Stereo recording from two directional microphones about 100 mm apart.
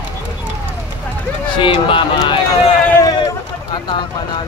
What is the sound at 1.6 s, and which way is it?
Speech, 60° left (ahead or behind).